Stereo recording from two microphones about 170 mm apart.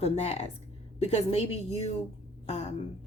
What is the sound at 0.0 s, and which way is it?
Speech, 40° left (ahead or behind).